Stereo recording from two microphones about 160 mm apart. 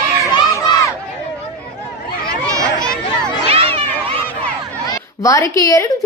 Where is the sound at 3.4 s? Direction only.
35° right (ahead or behind).